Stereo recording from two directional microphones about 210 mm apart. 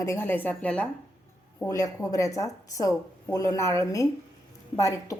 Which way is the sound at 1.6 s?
15° left (ahead or behind).